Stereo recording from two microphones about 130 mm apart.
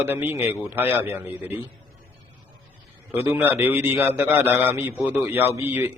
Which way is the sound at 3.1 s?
20° right (ahead or behind).